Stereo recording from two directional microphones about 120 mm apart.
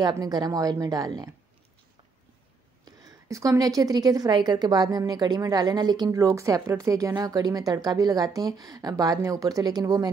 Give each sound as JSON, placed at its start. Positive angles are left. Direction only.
{"t": 0.1, "sound": "a woman's voice", "side_deg": -35}
{"t": 2.8, "sound": "a woman's voice", "side_deg": -30}